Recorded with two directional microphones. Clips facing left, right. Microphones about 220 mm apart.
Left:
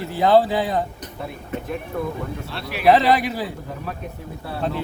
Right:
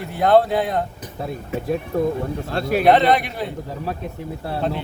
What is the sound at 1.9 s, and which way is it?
Speech, 35° right (ahead or behind).